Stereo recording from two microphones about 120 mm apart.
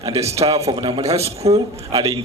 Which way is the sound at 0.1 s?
60° right (ahead or behind).